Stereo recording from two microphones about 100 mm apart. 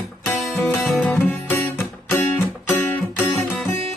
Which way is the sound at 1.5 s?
15° left (ahead or behind).